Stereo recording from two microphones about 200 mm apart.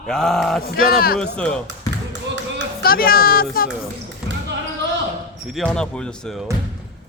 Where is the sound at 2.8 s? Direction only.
50° left (ahead or behind).